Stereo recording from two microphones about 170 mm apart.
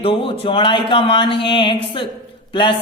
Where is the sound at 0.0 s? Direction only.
35° left (ahead or behind).